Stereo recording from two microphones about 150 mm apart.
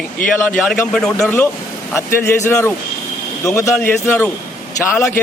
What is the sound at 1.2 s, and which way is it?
Speech, 15° left (ahead or behind).